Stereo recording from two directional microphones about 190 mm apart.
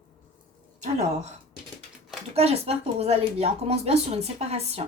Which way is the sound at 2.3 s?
35° right (ahead or behind).